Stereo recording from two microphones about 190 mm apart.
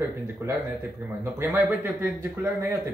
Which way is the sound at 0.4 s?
15° right (ahead or behind).